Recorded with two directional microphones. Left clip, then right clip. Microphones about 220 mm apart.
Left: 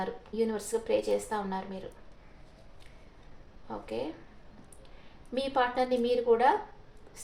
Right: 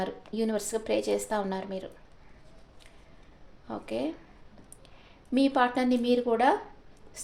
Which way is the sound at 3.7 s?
50° right (ahead or behind).